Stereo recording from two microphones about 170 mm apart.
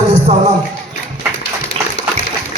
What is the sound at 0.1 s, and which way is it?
Music, 45° right (ahead or behind).